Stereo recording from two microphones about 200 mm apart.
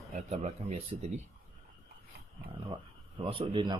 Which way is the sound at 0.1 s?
35° right (ahead or behind).